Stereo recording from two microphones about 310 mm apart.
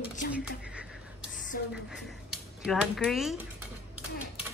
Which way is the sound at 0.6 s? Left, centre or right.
Centre.